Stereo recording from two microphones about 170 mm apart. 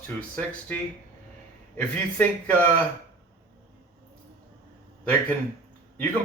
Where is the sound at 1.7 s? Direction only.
10° left (ahead or behind).